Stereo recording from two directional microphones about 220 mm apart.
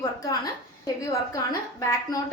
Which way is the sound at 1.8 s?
15° left (ahead or behind).